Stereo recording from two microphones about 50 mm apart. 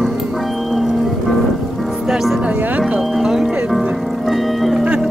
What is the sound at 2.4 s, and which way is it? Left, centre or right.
Music, right.